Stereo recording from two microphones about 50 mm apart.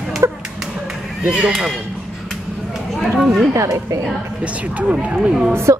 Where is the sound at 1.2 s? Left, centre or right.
Right.